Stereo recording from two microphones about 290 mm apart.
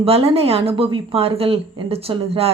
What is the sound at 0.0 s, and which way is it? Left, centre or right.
A woman's voice, centre.